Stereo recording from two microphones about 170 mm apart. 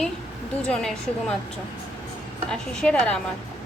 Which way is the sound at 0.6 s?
5° left (ahead or behind).